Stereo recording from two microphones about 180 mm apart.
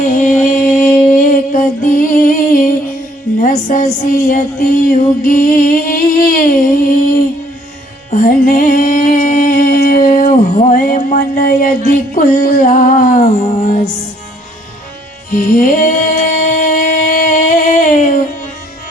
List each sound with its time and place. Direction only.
0.0 s music: 45° left (ahead or behind)
8.1 s music: 50° left (ahead or behind)
11.9 s a sound: 50° left (ahead or behind)
15.3 s music: 50° left (ahead or behind)